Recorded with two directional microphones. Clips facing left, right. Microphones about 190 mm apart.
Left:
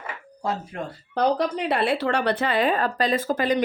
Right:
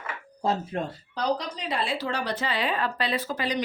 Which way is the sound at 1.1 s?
55° left (ahead or behind).